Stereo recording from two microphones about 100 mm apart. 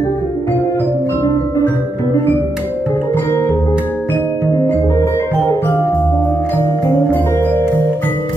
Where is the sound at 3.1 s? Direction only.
20° left (ahead or behind).